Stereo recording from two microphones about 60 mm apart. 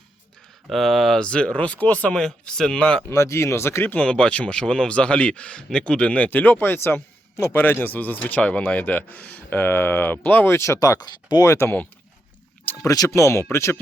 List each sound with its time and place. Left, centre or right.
0.7 s speech: centre
1.2 s speech: centre
2.2 s speech: centre
3.1 s speech: left
3.9 s a man's voice: centre; by 10.5 s left
10.5 s speech: left
12.7 s a sound: left
13.1 s speech: left